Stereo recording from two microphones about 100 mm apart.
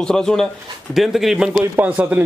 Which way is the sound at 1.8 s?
15° right (ahead or behind).